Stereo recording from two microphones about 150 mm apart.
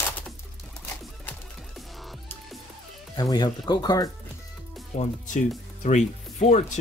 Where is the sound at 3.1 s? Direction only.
25° left (ahead or behind).